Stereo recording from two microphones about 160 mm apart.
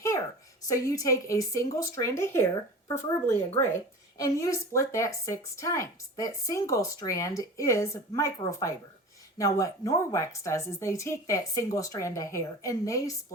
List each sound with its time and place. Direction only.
0.7 s speech: 20° left (ahead or behind)